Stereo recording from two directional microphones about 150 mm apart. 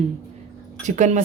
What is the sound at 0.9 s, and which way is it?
Speech, 55° right (ahead or behind).